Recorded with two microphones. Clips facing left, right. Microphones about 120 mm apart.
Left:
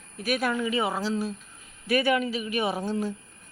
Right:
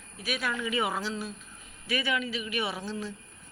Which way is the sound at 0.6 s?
35° left (ahead or behind).